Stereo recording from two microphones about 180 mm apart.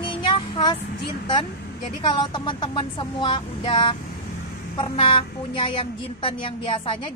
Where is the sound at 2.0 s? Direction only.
25° left (ahead or behind).